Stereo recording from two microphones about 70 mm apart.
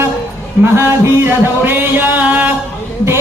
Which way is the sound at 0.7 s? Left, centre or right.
Right.